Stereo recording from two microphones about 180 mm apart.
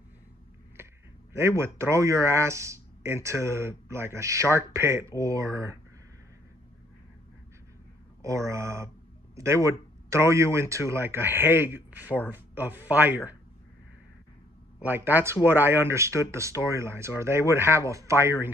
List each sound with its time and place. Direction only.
1.3 s speech: 15° right (ahead or behind)
8.2 s speech: 15° right (ahead or behind)
14.8 s speech: 10° right (ahead or behind)